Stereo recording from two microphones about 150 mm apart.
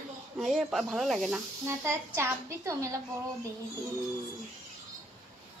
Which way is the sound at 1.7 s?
20° right (ahead or behind).